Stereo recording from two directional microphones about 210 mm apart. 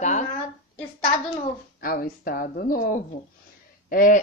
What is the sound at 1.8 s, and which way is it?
Speech, 45° left (ahead or behind).